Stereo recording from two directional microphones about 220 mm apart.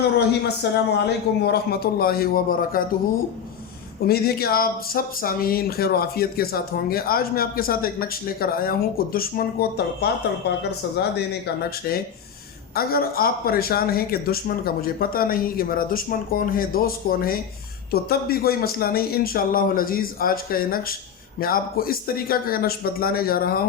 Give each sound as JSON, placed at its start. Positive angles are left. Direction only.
{"t": 0.2, "sound": "speech", "side_deg": 50}
{"t": 4.0, "sound": "speech", "side_deg": 45}